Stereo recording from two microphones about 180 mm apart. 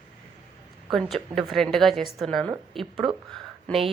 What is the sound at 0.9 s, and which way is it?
Speech, centre (ahead or behind).